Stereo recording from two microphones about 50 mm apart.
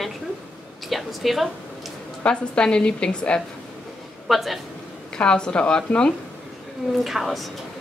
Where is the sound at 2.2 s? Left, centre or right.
Centre.